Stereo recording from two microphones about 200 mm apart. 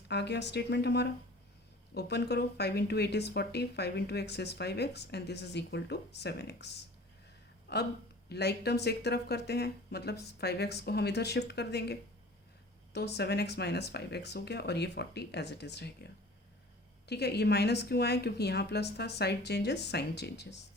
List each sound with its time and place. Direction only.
0.1 s a woman's voice: 60° left (ahead or behind)
17.1 s speech: 55° left (ahead or behind)